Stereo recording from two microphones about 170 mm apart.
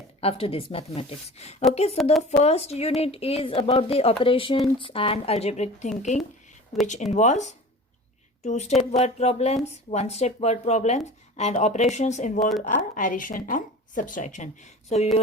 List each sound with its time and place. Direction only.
0.2 s a woman's voice: 35° left (ahead or behind)